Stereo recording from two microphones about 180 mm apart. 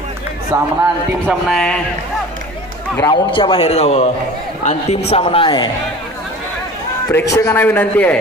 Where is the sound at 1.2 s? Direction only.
5° left (ahead or behind).